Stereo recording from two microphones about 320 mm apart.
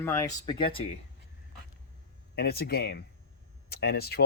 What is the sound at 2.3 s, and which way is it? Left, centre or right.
Speech, left.